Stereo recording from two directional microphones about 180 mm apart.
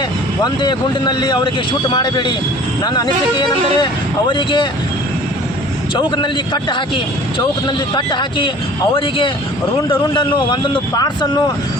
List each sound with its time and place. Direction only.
0.4 s a man's voice: 25° left (ahead or behind)
5.9 s a man's voice: 25° left (ahead or behind)